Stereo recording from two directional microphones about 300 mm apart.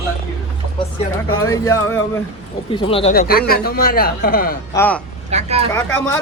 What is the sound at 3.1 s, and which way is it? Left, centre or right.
A man's voice, left.